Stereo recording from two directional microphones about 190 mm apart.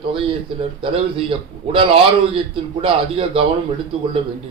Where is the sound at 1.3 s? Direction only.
30° right (ahead or behind).